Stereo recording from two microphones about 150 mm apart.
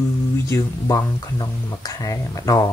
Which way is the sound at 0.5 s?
20° left (ahead or behind).